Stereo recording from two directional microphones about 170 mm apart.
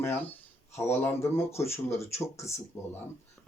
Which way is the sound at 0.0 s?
15° left (ahead or behind).